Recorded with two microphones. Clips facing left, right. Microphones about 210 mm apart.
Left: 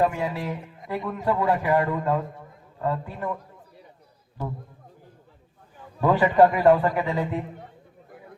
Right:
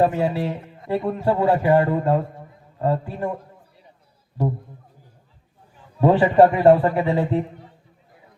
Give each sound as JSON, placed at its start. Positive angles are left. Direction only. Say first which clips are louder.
{"t": 0.0, "sound": "a man's voice", "louder": "right 5 dB", "side_deg": -30}
{"t": 6.0, "sound": "a man's voice", "louder": "right 4 dB", "side_deg": -30}